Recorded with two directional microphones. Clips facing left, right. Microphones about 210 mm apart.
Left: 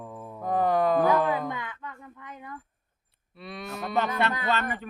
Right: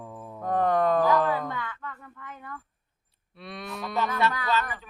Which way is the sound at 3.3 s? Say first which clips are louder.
Left 1 dB; centre (ahead or behind).